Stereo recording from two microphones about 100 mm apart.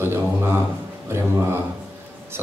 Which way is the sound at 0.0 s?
25° right (ahead or behind).